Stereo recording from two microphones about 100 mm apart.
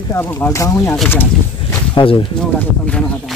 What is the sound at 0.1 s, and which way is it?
Speech, 20° left (ahead or behind).